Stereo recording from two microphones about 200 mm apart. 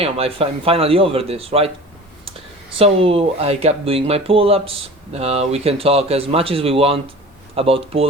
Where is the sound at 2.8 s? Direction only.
30° right (ahead or behind).